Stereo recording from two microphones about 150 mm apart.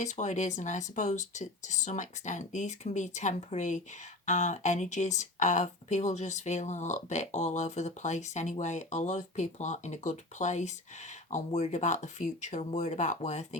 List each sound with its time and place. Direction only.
0.0 s speech: 50° left (ahead or behind)